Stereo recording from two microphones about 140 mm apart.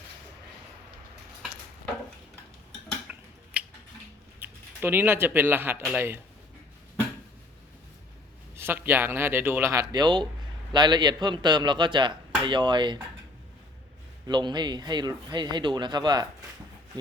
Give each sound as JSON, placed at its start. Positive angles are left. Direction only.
{"t": 3.1, "sound": "a sound", "side_deg": -10}
{"t": 3.5, "sound": "tick-tock", "side_deg": -10}
{"t": 4.4, "sound": "speech", "side_deg": -15}
{"t": 5.8, "sound": "speech", "side_deg": -5}
{"t": 8.5, "sound": "a man's voice", "side_deg": -15}
{"t": 14.3, "sound": "speech", "side_deg": -30}